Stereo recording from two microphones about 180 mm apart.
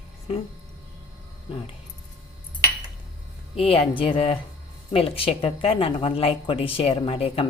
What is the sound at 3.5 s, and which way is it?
A woman's voice, 35° left (ahead or behind).